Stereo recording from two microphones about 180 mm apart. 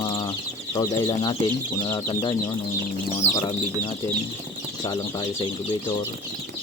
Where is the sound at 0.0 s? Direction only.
25° left (ahead or behind).